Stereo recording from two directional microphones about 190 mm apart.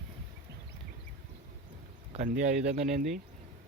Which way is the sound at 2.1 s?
40° right (ahead or behind).